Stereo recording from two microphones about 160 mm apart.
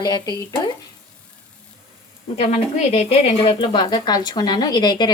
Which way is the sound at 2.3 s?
40° left (ahead or behind).